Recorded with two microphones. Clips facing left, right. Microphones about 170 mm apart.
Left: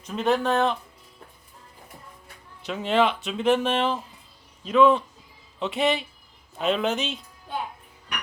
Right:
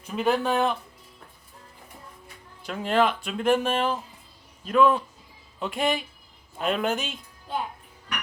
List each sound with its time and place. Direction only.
0.0 s speech: 5° right (ahead or behind)
2.6 s speech: centre (ahead or behind)